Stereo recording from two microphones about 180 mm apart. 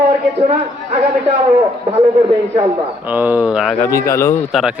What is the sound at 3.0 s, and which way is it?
Speech, 10° right (ahead or behind).